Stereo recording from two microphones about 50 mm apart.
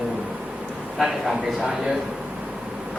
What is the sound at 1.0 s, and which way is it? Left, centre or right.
Speech, centre.